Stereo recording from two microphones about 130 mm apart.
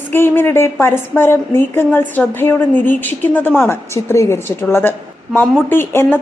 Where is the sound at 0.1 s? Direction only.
15° left (ahead or behind).